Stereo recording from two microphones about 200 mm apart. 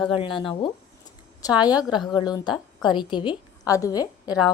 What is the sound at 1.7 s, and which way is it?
Speech, 5° right (ahead or behind).